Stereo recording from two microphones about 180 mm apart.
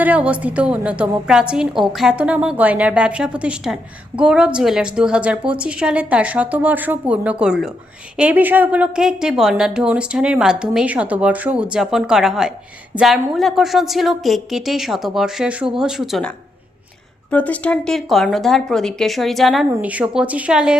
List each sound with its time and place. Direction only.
0.0 s a woman's voice: 10° right (ahead or behind)
17.3 s a woman's voice: 10° left (ahead or behind)